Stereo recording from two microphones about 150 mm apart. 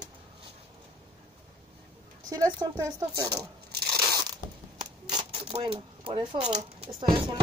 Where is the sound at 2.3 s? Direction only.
25° right (ahead or behind).